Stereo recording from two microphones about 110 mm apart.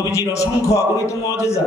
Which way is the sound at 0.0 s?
30° left (ahead or behind).